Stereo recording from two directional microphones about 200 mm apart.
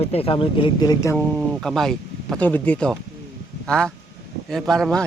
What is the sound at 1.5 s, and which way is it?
Speech, centre (ahead or behind).